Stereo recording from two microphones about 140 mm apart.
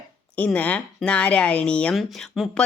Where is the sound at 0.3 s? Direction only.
10° left (ahead or behind).